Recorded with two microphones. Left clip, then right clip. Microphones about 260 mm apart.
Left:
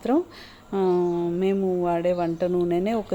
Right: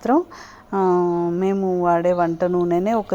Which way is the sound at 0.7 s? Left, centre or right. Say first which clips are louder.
Right 4 dB; centre.